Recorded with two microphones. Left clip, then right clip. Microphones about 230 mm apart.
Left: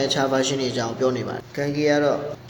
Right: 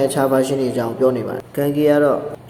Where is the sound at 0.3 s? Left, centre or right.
Right.